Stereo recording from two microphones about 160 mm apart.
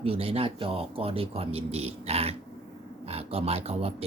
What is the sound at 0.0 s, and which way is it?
Speech, 35° right (ahead or behind).